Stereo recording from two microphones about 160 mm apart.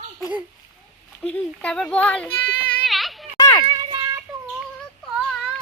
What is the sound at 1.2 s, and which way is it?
A child's voice, 5° left (ahead or behind).